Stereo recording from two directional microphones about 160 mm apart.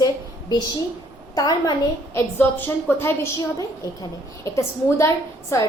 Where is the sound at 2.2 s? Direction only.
15° left (ahead or behind).